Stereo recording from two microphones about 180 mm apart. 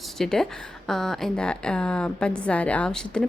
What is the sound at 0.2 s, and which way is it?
A woman's voice, 5° left (ahead or behind).